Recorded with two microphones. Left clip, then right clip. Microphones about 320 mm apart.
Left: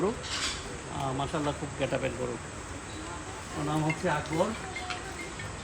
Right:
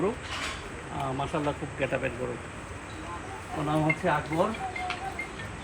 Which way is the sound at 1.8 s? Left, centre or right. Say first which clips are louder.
Right 1 dB; centre.